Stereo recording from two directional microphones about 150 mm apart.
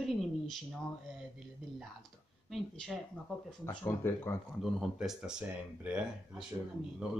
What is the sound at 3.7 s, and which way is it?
Speech, 20° left (ahead or behind).